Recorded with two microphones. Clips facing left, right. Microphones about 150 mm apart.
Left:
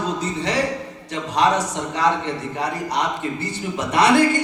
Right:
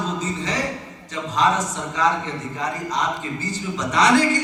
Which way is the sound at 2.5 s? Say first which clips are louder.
Left 1 dB; 65° left (ahead or behind).